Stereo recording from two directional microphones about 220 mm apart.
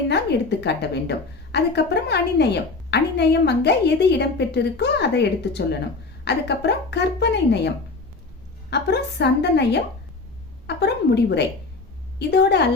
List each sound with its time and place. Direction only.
0.1 s a woman's voice: 50° left (ahead or behind)
8.7 s a woman's voice: 50° left (ahead or behind)